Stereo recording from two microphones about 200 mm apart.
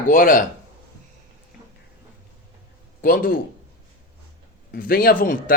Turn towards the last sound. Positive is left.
turn(degrees=45)  # may be behind; listen again after turning